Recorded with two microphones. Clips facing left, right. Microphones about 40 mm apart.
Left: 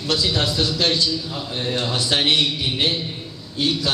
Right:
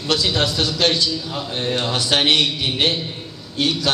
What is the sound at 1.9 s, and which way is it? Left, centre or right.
Speech, right.